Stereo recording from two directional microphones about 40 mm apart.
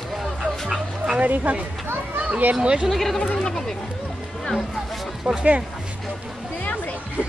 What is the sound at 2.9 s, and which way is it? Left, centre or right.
Speech, centre.